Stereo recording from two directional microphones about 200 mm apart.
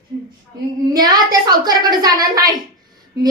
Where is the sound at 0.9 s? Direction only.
20° right (ahead or behind).